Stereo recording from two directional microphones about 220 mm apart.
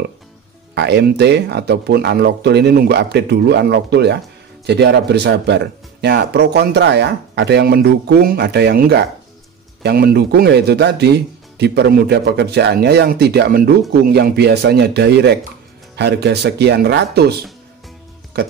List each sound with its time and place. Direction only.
0.7 s speech: 50° right (ahead or behind)